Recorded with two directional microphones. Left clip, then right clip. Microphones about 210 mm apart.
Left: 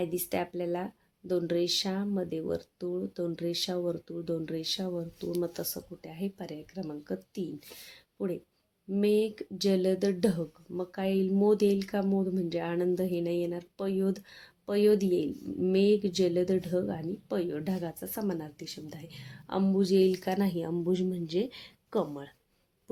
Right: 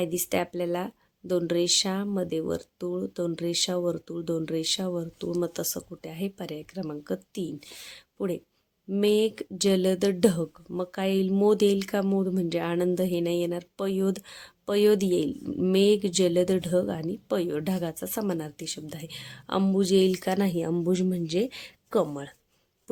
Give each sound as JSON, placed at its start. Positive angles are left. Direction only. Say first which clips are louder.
{"t": 0.0, "sound": "speech", "louder": "right 4 dB", "side_deg": -25}